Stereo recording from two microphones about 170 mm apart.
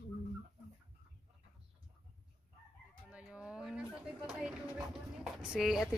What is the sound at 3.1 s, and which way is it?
Dog, 5° right (ahead or behind).